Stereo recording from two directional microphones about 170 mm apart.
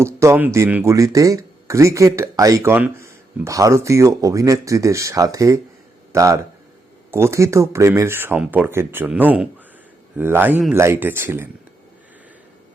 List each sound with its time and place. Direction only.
0.0 s speech: 15° right (ahead or behind)